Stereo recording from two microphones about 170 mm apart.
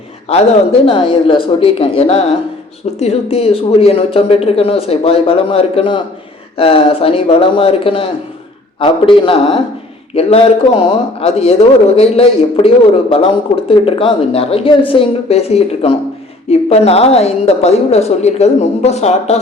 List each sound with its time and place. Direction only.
0.3 s speech: 35° left (ahead or behind)